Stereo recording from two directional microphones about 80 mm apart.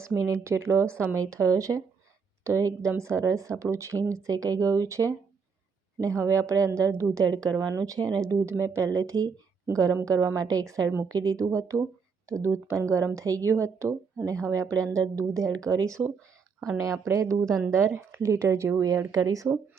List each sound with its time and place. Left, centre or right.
0.0 s a woman's voice: right